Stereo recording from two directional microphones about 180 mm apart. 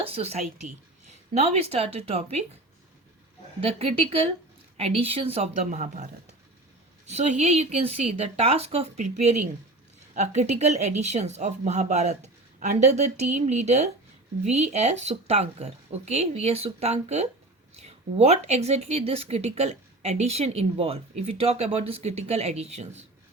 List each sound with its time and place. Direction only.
0.0 s a woman's voice: 35° right (ahead or behind)
3.6 s speech: 35° right (ahead or behind)
7.1 s speech: 40° right (ahead or behind)